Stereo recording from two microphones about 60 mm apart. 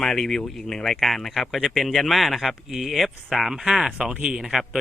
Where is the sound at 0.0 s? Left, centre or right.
Centre.